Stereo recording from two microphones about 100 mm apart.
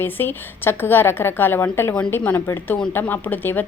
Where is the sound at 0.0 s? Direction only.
20° left (ahead or behind).